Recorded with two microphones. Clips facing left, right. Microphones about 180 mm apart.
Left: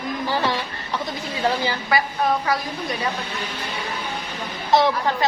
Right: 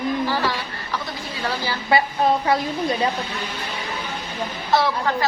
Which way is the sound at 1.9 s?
25° right (ahead or behind).